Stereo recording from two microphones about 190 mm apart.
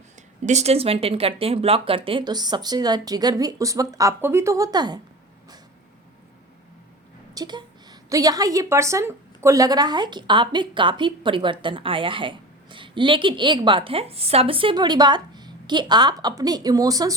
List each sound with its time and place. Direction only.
0.2 s a woman's voice: 40° right (ahead or behind); by 4.9 s 20° right (ahead or behind)
7.3 s a woman's voice: 20° right (ahead or behind)